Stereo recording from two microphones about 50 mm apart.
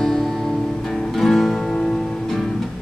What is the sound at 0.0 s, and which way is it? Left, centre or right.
Music, centre.